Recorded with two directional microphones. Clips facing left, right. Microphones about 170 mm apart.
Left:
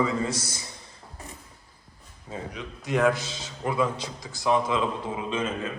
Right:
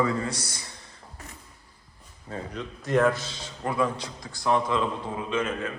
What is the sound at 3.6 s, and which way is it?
A man's voice, 10° left (ahead or behind).